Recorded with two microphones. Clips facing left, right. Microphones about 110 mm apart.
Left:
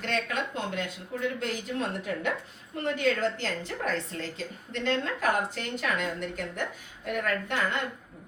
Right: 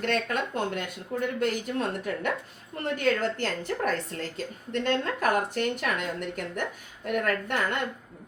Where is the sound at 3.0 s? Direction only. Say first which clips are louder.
Right 2 dB; 50° right (ahead or behind).